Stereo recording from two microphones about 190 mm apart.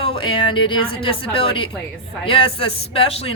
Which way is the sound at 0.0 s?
25° left (ahead or behind).